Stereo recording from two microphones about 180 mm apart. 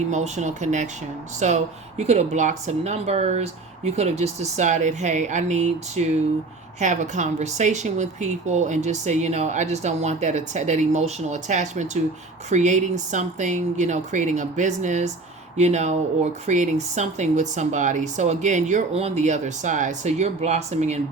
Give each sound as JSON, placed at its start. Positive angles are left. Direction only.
{"t": 0.1, "sound": "speech", "side_deg": -40}